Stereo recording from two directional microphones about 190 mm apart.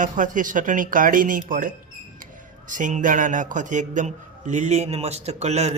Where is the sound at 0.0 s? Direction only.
45° right (ahead or behind).